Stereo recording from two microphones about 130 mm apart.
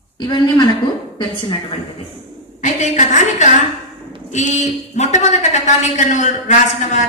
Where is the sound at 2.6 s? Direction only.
70° left (ahead or behind).